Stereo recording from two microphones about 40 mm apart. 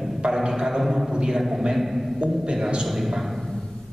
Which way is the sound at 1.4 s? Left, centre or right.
Centre.